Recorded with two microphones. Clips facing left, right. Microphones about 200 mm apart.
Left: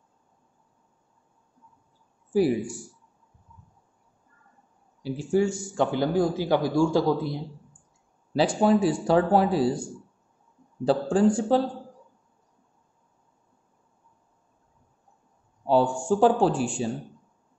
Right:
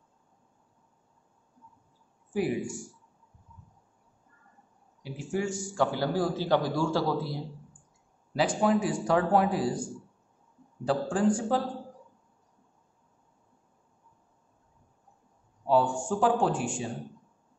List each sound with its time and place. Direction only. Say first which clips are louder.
2.3 s speech: left 6 dB; 35° left (ahead or behind)
5.0 s a man's voice: left 8 dB; 30° left (ahead or behind)
8.3 s speech: left 4 dB; 30° left (ahead or behind)
10.8 s speech: left 5 dB; 30° left (ahead or behind)
15.6 s a sound: left 3 dB; 30° left (ahead or behind)
16.1 s speech: left 7 dB; 30° left (ahead or behind)